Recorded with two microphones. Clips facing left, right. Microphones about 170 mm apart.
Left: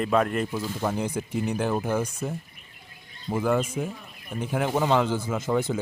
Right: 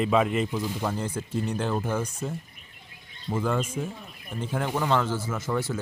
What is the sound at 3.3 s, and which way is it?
Speech, 10° left (ahead or behind).